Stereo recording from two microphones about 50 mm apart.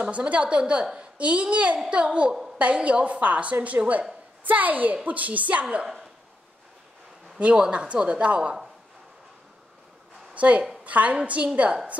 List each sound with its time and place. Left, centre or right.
0.0 s a woman's voice: right
2.3 s a sound: centre
2.6 s a woman's voice: right
7.3 s a man's voice: right
10.3 s a woman's voice: right